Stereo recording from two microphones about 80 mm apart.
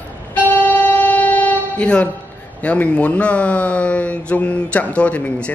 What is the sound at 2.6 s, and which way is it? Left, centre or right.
Speech, centre.